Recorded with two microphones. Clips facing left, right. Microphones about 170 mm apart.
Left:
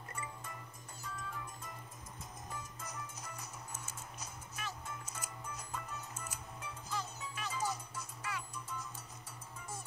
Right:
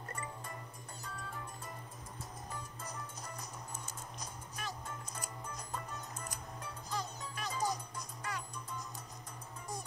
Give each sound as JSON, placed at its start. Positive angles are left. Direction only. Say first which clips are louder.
{"t": 0.1, "sound": "music", "louder": "right 1 dB", "side_deg": -35}
{"t": 2.8, "sound": "music", "louder": "right 1 dB", "side_deg": -35}